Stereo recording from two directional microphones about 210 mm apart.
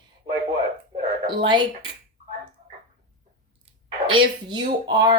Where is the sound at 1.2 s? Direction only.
20° right (ahead or behind).